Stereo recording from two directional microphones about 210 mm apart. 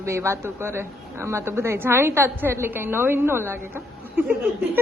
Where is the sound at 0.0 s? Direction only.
15° right (ahead or behind).